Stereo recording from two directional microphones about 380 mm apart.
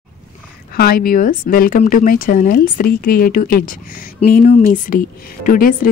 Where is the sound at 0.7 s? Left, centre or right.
Left.